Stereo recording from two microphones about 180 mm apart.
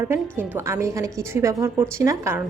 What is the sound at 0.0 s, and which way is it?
Speech, 15° right (ahead or behind).